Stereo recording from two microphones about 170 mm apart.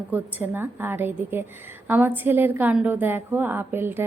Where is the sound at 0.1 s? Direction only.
10° right (ahead or behind).